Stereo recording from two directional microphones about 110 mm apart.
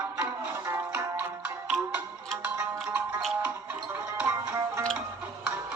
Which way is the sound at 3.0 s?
15° right (ahead or behind).